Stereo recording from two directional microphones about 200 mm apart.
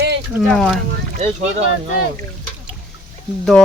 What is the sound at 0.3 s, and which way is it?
Speech, centre (ahead or behind).